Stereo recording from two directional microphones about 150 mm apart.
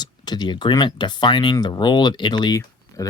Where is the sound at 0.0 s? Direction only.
30° left (ahead or behind).